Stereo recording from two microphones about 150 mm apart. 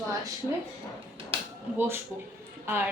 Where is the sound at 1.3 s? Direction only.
35° right (ahead or behind).